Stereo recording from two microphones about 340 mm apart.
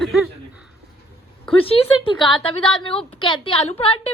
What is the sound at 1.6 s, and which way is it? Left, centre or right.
A woman's voice, centre.